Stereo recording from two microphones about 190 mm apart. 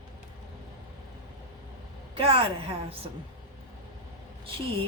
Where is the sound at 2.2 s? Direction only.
30° right (ahead or behind).